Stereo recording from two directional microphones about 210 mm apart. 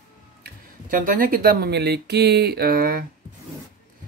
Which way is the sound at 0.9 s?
40° right (ahead or behind).